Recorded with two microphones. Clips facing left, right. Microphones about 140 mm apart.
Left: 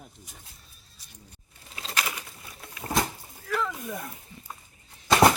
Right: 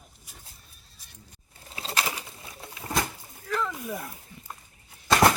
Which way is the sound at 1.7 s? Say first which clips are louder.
Right 2 dB; 30° right (ahead or behind).